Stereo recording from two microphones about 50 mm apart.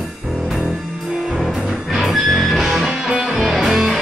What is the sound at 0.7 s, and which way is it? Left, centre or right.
Music, centre.